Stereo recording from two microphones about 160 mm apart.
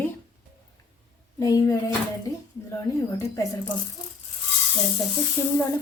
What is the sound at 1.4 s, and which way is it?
Speech, 20° left (ahead or behind).